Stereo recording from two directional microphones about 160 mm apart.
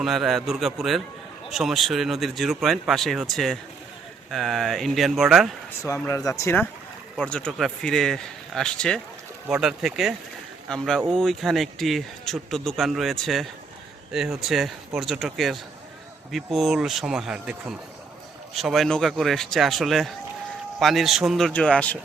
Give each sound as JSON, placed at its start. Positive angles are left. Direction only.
{"t": 0.0, "sound": "speech", "side_deg": 0}
{"t": 5.8, "sound": "speech", "side_deg": 20}